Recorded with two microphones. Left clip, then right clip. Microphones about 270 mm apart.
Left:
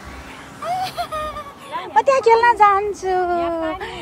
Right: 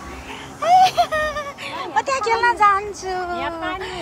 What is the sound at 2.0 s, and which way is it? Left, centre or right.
Speech, centre.